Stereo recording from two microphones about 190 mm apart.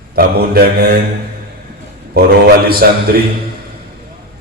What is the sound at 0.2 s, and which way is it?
Speech, 55° right (ahead or behind).